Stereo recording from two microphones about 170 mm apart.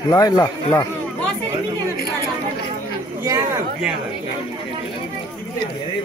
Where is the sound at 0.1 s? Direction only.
20° left (ahead or behind).